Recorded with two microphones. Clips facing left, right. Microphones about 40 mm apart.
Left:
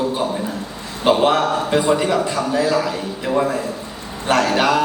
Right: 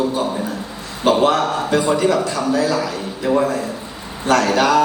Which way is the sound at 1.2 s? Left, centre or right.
Centre.